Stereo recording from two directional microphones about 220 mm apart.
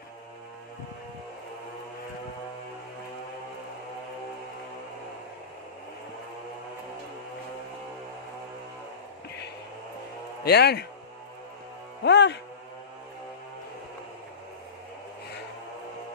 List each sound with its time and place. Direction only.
10.4 s a man's voice: 45° left (ahead or behind)
12.0 s a man's voice: 50° left (ahead or behind)